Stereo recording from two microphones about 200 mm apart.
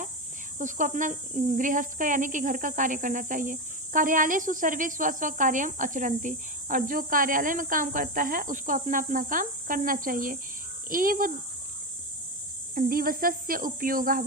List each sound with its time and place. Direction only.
0.6 s a child's voice: 40° right (ahead or behind)
12.7 s cricket: 45° right (ahead or behind)